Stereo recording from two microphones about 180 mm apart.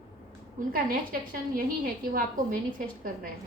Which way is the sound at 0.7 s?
55° right (ahead or behind).